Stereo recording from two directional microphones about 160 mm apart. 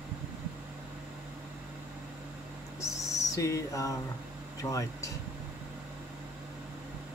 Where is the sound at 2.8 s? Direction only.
20° left (ahead or behind).